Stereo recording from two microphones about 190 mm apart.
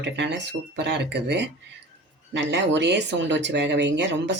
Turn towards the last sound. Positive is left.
turn(degrees=-65)  # may be behind; listen again after turning